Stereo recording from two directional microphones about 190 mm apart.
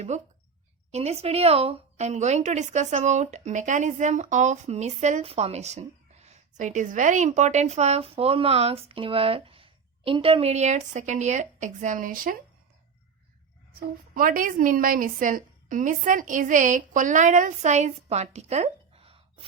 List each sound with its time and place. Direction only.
0.1 s a woman's voice: 40° right (ahead or behind)
13.7 s a woman's voice: 50° right (ahead or behind); by 19.5 s 30° right (ahead or behind)